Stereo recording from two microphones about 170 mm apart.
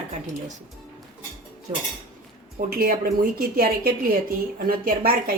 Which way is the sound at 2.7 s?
55° right (ahead or behind).